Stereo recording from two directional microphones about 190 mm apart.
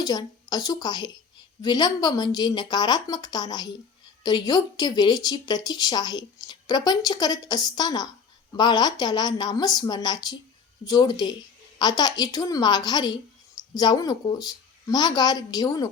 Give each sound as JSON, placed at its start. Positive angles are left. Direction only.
{"t": 0.0, "sound": "a woman's voice", "side_deg": 20}